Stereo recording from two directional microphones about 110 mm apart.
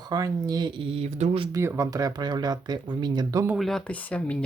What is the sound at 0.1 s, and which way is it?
Speech, 35° right (ahead or behind).